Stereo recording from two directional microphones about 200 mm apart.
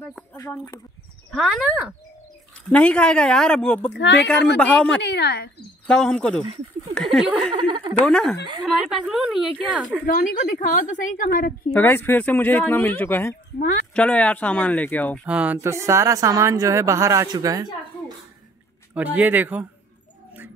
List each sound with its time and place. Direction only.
0.4 s speech: 15° left (ahead or behind)
1.3 s a woman's voice: centre (ahead or behind)
3.9 s speech: 60° left (ahead or behind)
4.6 s a woman's voice: 5° left (ahead or behind)
5.0 s speech: 55° left (ahead or behind)
5.9 s a woman's voice: 5° left (ahead or behind)
7.5 s a woman's voice: 25° right (ahead or behind)
8.0 s a woman's voice: 5° left (ahead or behind)
10.0 s a woman's voice: 45° left (ahead or behind)
11.7 s speech: 10° left (ahead or behind)
15.2 s a woman's voice: 5° right (ahead or behind)